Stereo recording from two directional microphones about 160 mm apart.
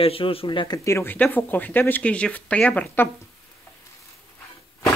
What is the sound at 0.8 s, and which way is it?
Speech, 15° left (ahead or behind).